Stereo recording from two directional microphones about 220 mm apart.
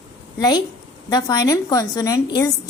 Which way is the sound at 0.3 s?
20° left (ahead or behind).